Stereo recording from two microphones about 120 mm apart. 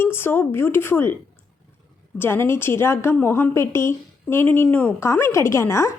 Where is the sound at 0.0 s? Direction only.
20° left (ahead or behind).